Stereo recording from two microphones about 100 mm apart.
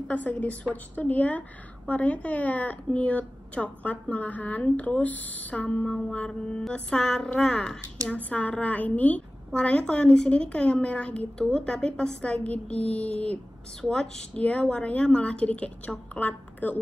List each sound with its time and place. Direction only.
0.1 s a woman's voice: 15° left (ahead or behind)